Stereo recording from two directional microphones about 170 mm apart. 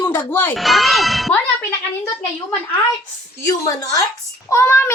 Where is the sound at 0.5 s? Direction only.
Centre (ahead or behind).